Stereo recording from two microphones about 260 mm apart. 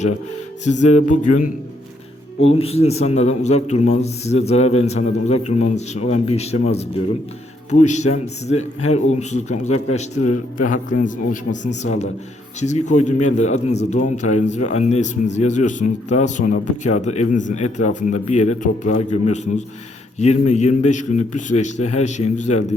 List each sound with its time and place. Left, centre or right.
0.6 s a man's voice: left
2.5 s a man's voice: left
10.2 s speech: left
10.7 s a man's voice: left